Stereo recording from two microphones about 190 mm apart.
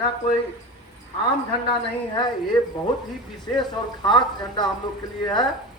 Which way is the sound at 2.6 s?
20° left (ahead or behind).